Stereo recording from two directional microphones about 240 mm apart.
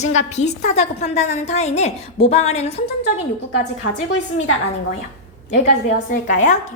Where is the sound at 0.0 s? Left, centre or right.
Left.